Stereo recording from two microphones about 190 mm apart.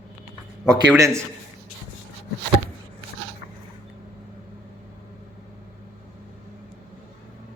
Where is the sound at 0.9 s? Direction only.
15° right (ahead or behind).